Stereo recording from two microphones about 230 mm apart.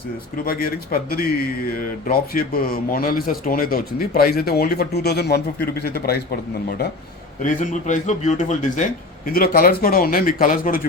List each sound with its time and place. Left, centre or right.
0.4 s speech: left
7.4 s speech: left